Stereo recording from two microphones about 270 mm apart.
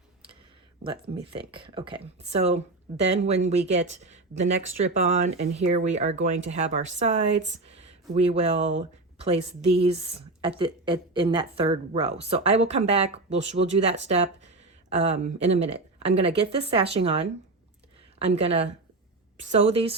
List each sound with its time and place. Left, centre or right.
1.5 s speech: centre